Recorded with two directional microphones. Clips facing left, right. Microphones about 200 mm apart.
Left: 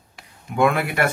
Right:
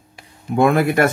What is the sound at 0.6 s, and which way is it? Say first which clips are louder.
Speech: right 5 dB; 40° right (ahead or behind).